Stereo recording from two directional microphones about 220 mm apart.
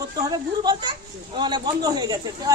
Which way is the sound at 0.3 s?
20° right (ahead or behind).